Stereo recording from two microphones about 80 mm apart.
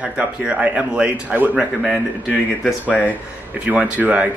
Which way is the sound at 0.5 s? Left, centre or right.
Centre.